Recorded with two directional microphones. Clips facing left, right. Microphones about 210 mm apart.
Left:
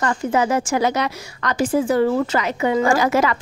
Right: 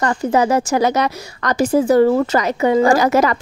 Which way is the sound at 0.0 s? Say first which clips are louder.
Right 3 dB; 35° right (ahead or behind).